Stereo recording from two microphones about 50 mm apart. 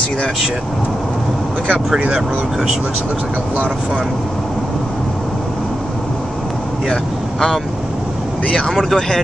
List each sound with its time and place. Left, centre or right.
2.0 s speech: right
6.9 s speech: centre